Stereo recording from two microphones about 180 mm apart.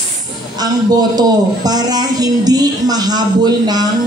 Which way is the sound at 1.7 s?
20° right (ahead or behind).